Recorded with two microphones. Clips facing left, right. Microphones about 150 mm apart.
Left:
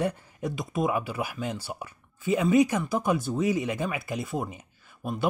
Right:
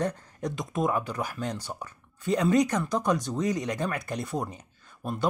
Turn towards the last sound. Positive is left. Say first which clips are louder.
# even
turn(degrees=5)  # may be behind; listen again after turning